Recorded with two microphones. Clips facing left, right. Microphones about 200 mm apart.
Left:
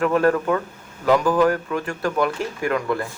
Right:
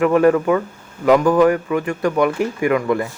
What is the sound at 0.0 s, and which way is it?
Speech, 5° right (ahead or behind).